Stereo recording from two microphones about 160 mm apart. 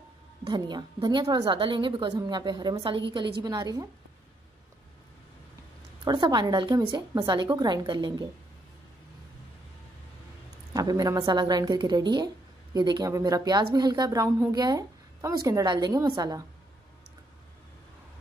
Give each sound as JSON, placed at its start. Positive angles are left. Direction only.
{"t": 0.5, "sound": "a woman's voice", "side_deg": -30}
{"t": 6.0, "sound": "a woman's voice", "side_deg": -25}
{"t": 10.7, "sound": "a woman's voice", "side_deg": -25}